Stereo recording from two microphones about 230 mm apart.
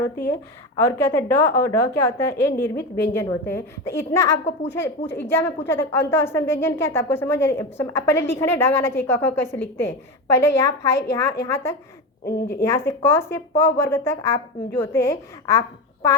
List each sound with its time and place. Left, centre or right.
0.8 s a woman's voice: centre
12.2 s a woman's voice: left
12.6 s a woman's voice: centre